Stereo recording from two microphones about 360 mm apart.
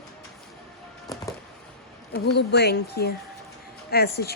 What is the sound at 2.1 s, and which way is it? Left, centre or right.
Speech, left.